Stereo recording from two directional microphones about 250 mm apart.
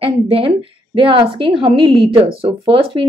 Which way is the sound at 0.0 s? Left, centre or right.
Right.